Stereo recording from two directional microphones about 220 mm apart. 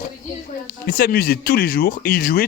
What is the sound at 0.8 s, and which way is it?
A man's voice, 45° left (ahead or behind).